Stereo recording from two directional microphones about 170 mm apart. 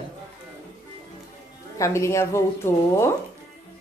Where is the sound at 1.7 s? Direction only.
15° left (ahead or behind).